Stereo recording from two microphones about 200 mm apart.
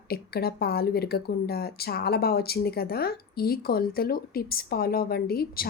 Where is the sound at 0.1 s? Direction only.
50° left (ahead or behind).